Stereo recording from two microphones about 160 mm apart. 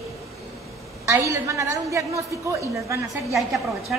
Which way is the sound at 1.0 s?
20° right (ahead or behind).